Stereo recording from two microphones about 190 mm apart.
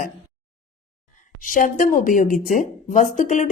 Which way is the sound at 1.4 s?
45° left (ahead or behind).